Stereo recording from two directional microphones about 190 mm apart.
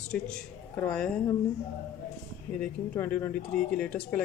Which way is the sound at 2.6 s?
10° left (ahead or behind).